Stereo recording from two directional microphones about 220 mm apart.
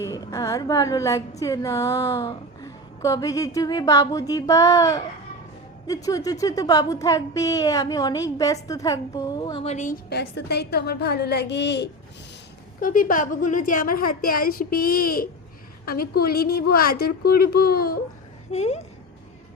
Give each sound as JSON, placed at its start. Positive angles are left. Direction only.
{"t": 0.0, "sound": "a woman's voice", "side_deg": 15}
{"t": 12.8, "sound": "a woman's voice", "side_deg": 40}
{"t": 18.5, "sound": "speech", "side_deg": 30}